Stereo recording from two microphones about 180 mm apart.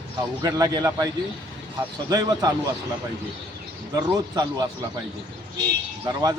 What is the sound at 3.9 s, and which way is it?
Speech, 20° right (ahead or behind).